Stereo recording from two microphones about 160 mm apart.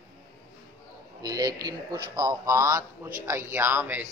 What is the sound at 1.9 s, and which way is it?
A man's voice, 25° right (ahead or behind).